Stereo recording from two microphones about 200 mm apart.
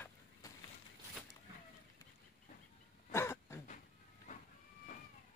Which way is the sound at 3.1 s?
15° left (ahead or behind).